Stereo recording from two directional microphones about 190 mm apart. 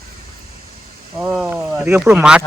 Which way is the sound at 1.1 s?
5° right (ahead or behind).